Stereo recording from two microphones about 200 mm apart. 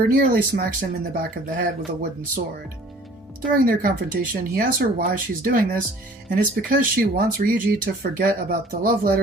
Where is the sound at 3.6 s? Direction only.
45° right (ahead or behind).